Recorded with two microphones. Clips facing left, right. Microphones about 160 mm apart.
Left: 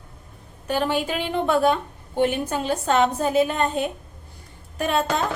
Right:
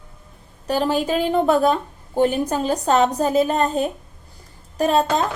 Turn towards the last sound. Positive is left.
turn(degrees=-35)  # may be behind; listen again after turning